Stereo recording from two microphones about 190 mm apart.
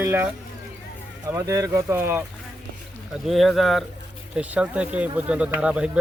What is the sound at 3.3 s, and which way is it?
Speech, centre (ahead or behind).